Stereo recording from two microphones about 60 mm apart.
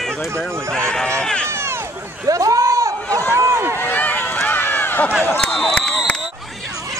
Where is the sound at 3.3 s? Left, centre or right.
Right.